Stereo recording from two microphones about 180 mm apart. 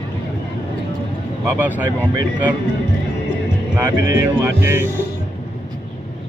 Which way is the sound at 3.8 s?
15° right (ahead or behind).